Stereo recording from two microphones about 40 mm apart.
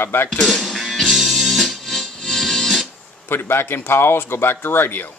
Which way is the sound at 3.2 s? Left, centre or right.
Left.